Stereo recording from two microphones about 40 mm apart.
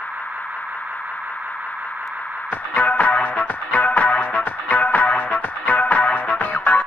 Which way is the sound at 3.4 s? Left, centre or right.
Left.